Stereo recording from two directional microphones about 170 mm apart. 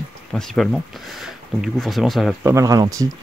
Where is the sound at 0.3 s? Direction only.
Centre (ahead or behind).